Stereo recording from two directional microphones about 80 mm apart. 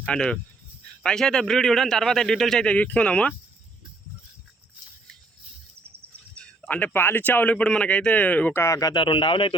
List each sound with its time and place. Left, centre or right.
0.1 s a man's voice: centre
6.3 s a sound: centre
6.7 s speech: left
8.5 s speech: left
8.8 s speech: left